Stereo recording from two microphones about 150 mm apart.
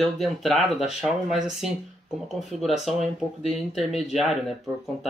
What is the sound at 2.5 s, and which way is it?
Speech, centre (ahead or behind).